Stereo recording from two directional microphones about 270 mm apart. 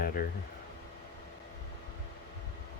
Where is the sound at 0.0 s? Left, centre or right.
Left.